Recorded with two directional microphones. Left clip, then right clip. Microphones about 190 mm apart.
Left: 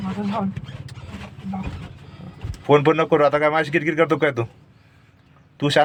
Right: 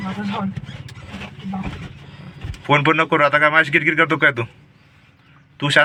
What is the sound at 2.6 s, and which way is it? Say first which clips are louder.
Speech: even; 20° left (ahead or behind).